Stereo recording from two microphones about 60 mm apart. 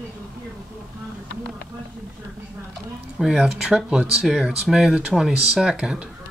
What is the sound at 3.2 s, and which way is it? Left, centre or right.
Speech, centre.